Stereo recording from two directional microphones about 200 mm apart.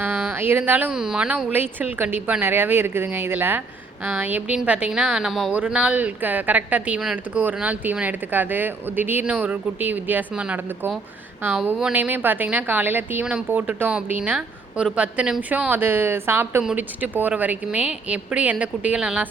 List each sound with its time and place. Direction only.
0.0 s a woman's voice: 10° right (ahead or behind)